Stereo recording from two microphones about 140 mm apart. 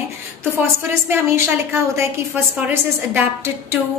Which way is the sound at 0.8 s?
15° right (ahead or behind).